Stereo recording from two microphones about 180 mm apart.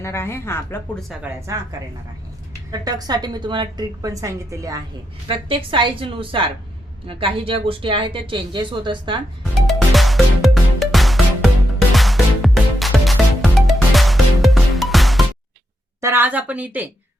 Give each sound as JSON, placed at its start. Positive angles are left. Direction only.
{"t": 0.0, "sound": "a woman's voice", "side_deg": 15}
{"t": 0.9, "sound": "speech", "side_deg": 0}
{"t": 2.7, "sound": "speech", "side_deg": -20}
{"t": 5.3, "sound": "speech", "side_deg": -30}
{"t": 9.6, "sound": "music", "side_deg": 0}
{"t": 16.0, "sound": "speech", "side_deg": -10}